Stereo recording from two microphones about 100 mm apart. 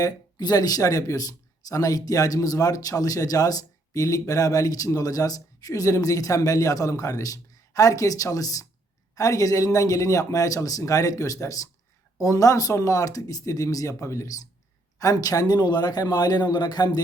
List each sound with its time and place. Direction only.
0.0 s speech: 40° left (ahead or behind)